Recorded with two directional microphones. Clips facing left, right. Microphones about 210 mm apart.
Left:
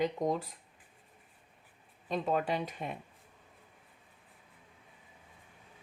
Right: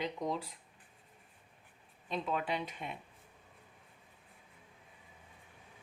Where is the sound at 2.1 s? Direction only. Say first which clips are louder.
Left 4 dB; 45° left (ahead or behind).